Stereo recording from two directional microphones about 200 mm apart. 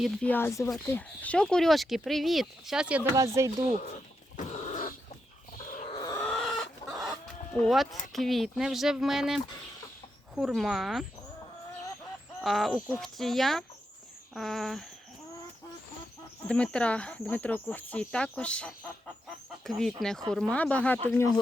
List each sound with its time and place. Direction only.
0.0 s speech: 5° left (ahead or behind); by 3.5 s 15° right (ahead or behind)
4.4 s a sound: 40° left (ahead or behind)
6.0 s chicken: 15° left (ahead or behind)
6.2 s chicken: centre (ahead or behind)
7.5 s speech: centre (ahead or behind)
12.4 s speech: centre (ahead or behind)
16.5 s speech: 5° left (ahead or behind)